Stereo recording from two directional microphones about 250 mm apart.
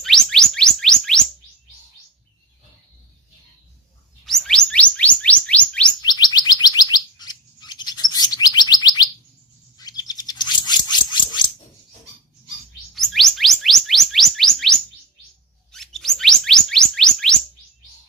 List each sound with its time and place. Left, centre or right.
0.0 s chirp tone: centre
4.3 s chirp tone: centre
6.0 s bird: centre
12.9 s chirp tone: centre